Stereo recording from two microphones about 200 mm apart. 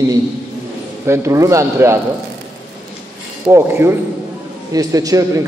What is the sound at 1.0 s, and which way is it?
Speech, 15° right (ahead or behind).